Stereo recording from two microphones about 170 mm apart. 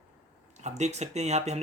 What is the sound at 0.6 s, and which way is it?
Speech, 40° right (ahead or behind).